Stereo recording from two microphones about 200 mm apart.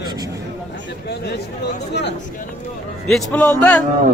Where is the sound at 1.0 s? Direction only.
55° left (ahead or behind).